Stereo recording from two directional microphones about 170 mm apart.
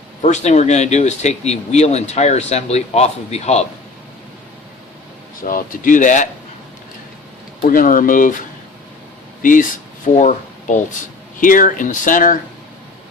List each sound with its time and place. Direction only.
0.2 s speech: 40° left (ahead or behind)
5.5 s speech: 50° left (ahead or behind)
7.6 s speech: 55° left (ahead or behind)
9.4 s speech: 50° left (ahead or behind)